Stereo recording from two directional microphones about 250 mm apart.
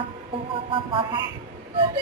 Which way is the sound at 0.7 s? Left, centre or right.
Centre.